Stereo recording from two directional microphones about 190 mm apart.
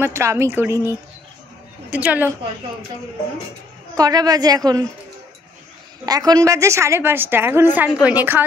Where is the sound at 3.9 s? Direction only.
20° right (ahead or behind).